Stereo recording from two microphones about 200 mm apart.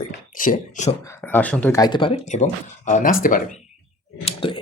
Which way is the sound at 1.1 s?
10° left (ahead or behind).